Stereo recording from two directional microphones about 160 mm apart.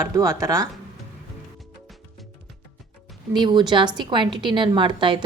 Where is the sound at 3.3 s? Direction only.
25° right (ahead or behind).